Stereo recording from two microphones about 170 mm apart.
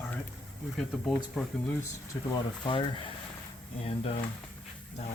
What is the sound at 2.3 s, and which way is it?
Speech, 30° left (ahead or behind).